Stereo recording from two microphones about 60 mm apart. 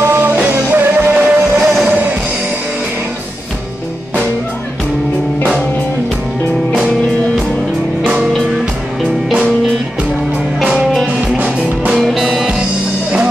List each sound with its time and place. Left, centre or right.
0.0 s music: right
10.6 s music: centre
11.1 s music: right
11.9 s music: centre